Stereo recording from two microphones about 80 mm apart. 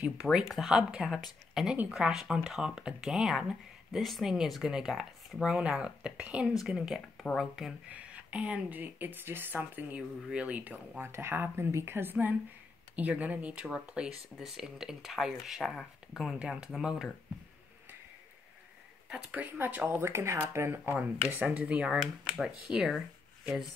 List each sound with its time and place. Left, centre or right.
0.0 s speech: centre
7.9 s speech: centre
11.0 s speech: right; by 15.9 s centre
16.3 s speech: centre
19.0 s speech: centre
19.9 s speech: right
21.5 s speech: centre